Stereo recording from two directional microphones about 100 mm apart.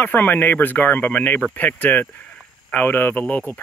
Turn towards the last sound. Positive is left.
turn(degrees=15)  # may be behind; listen again after turning